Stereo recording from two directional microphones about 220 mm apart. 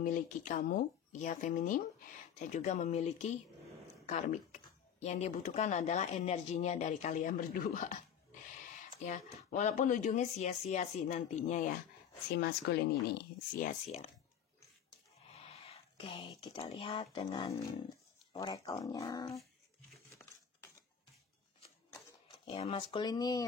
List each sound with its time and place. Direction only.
0.0 s speech: 35° left (ahead or behind)
9.0 s speech: 35° left (ahead or behind)
12.4 s speech: 50° left (ahead or behind)
13.6 s speech: 30° left (ahead or behind)
15.3 s speech: 25° left (ahead or behind)
20.2 s a sound: 10° left (ahead or behind)
22.4 s speech: 25° left (ahead or behind)